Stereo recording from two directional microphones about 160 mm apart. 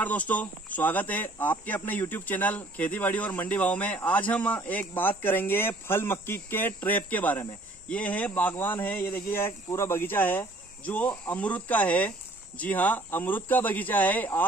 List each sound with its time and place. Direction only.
0.0 s speech: 10° left (ahead or behind)